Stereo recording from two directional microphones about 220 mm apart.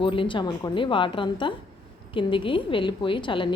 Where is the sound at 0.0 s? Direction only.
20° left (ahead or behind).